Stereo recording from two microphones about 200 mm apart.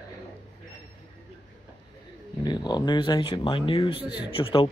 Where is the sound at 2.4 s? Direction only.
20° left (ahead or behind).